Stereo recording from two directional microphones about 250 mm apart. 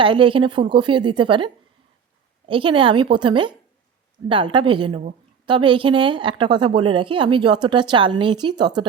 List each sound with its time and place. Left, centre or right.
0.0 s a woman's voice: centre
2.5 s a woman's voice: right